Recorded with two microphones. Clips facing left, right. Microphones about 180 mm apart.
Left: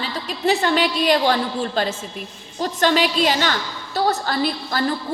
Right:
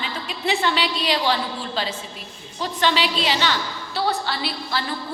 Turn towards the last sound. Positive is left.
turn(degrees=45)  # may be behind; listen again after turning